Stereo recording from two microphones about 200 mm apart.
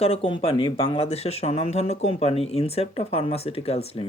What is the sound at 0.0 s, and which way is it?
Speech, 30° left (ahead or behind).